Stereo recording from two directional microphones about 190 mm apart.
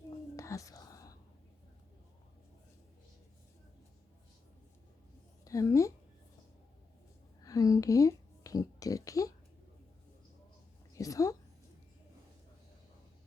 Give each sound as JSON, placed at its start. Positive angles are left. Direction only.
{"t": 0.3, "sound": "whispering", "side_deg": 15}
{"t": 5.5, "sound": "speech", "side_deg": 15}
{"t": 7.4, "sound": "speech", "side_deg": 20}
{"t": 10.9, "sound": "a woman's voice", "side_deg": 15}